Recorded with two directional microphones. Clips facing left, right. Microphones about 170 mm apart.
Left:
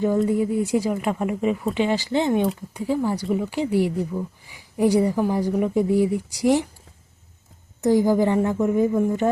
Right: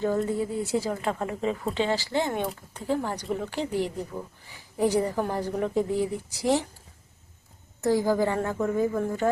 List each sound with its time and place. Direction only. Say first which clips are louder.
0.0 s speech: left 6 dB; 15° left (ahead or behind)
7.8 s speech: left 5 dB; 20° left (ahead or behind)